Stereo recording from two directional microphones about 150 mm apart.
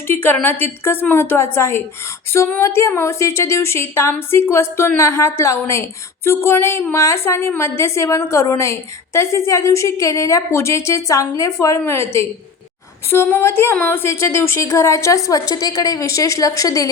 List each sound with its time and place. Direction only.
0.1 s a woman's voice: 15° left (ahead or behind)